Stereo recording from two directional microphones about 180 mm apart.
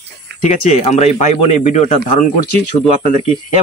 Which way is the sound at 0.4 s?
40° left (ahead or behind).